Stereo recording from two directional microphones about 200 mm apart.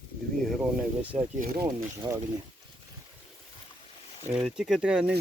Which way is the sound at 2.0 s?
15° right (ahead or behind).